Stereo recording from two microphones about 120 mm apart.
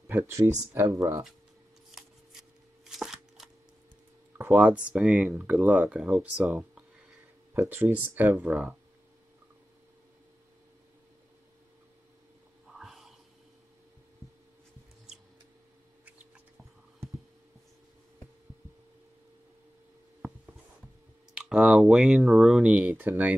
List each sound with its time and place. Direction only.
0.0 s speech: 25° right (ahead or behind)
1.9 s shuffling cards: centre (ahead or behind)
4.4 s speech: 10° right (ahead or behind)
7.5 s speech: 20° right (ahead or behind)
8.4 s speech: 5° right (ahead or behind)
12.7 s a sound: centre (ahead or behind)
21.4 s speech: 5° right (ahead or behind)